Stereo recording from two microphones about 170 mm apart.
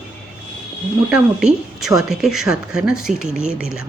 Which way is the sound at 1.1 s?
5° right (ahead or behind).